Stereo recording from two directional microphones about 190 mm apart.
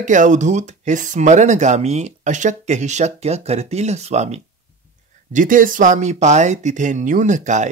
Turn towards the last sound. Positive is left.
turn(degrees=-40)  # may be behind; listen again after turning